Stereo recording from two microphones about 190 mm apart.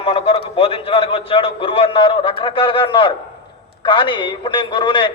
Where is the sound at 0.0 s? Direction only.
30° left (ahead or behind).